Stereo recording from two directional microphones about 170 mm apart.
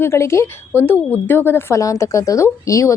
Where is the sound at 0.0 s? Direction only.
15° left (ahead or behind).